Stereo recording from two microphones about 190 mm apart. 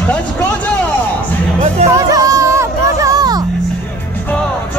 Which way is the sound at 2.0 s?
20° right (ahead or behind).